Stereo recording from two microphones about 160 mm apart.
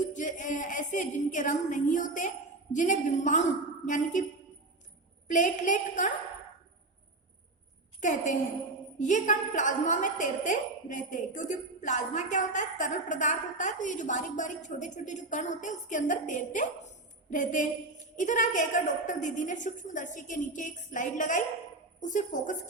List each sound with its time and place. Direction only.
0.0 s a woman's voice: 50° left (ahead or behind)
5.3 s a woman's voice: 50° left (ahead or behind)
8.0 s a woman's voice: 50° left (ahead or behind)